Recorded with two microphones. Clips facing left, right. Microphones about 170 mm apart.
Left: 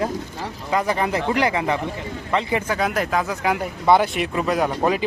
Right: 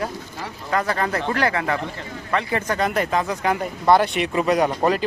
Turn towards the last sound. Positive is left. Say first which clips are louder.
# right 1 dB
turn(degrees=5)  # may be behind; listen again after turning